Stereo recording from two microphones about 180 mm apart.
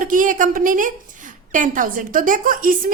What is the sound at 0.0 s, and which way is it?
A woman's voice, 45° right (ahead or behind).